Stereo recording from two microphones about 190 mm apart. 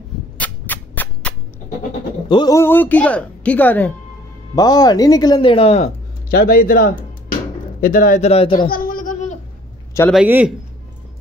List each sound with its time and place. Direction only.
0.4 s a sound: 10° left (ahead or behind)
2.2 s speech: 20° left (ahead or behind)
4.6 s speech: 20° left (ahead or behind)
6.3 s a man's voice: 50° left (ahead or behind)
8.3 s speech: 30° left (ahead or behind)
8.5 s a sound: 50° left (ahead or behind)
10.1 s a man's voice: 10° right (ahead or behind)